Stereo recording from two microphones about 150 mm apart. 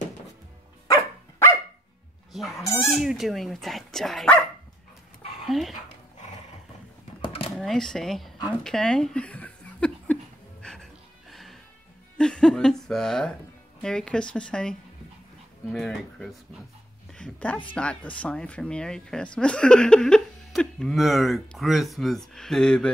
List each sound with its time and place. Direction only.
2.3 s speech: centre (ahead or behind)
5.5 s speech: centre (ahead or behind)
7.2 s a sound: 40° left (ahead or behind)
7.5 s speech: centre (ahead or behind)
8.6 s a sound: 5° left (ahead or behind)
10.6 s music: 5° left (ahead or behind)
12.2 s chuckle: 5° left (ahead or behind)
13.8 s a woman's voice: 5° left (ahead or behind)